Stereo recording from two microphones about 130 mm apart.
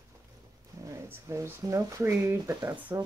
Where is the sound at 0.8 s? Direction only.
20° right (ahead or behind).